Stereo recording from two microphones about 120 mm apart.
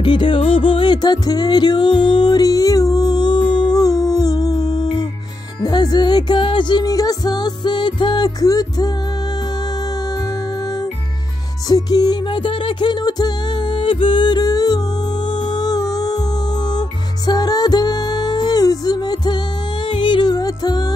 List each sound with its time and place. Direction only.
0.0 s music: 40° left (ahead or behind)
11.7 s music: 35° left (ahead or behind)